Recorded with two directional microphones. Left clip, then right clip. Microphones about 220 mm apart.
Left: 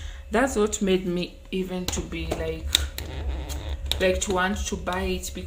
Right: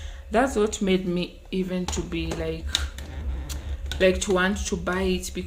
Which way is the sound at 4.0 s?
20° right (ahead or behind).